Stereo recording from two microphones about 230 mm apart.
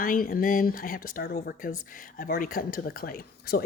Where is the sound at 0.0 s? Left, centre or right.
Left.